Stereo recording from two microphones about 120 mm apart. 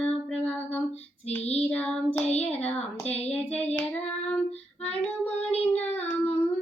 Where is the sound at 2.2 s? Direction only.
65° left (ahead or behind).